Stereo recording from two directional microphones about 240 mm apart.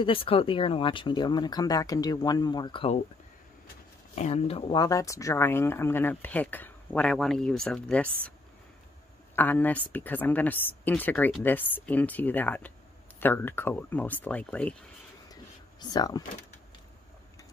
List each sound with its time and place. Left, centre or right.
0.0 s speech: left
4.1 s speech: left; by 8.1 s centre
9.3 s speech: centre
15.8 s speech: centre